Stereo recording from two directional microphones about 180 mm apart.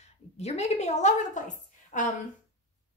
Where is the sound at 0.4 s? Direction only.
40° left (ahead or behind).